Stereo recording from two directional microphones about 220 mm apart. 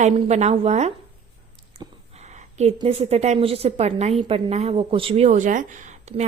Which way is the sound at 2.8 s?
25° right (ahead or behind).